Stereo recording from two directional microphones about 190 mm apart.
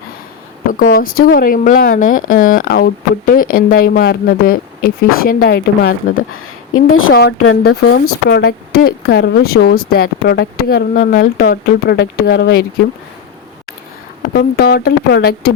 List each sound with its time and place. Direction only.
0.7 s speech: 50° left (ahead or behind)
14.2 s speech: 55° left (ahead or behind)